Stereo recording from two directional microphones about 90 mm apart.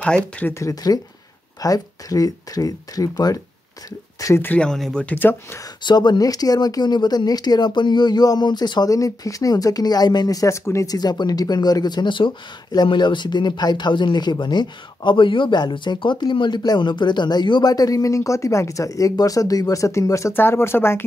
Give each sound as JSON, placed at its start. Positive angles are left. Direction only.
{"t": 0.0, "sound": "speech", "side_deg": 10}
{"t": 0.5, "sound": "speech", "side_deg": 35}
{"t": 4.6, "sound": "speech", "side_deg": 5}
{"t": 5.1, "sound": "speech", "side_deg": 25}
{"t": 5.9, "sound": "speech", "side_deg": 55}
{"t": 8.9, "sound": "speech", "side_deg": 40}
{"t": 11.0, "sound": "speech", "side_deg": 50}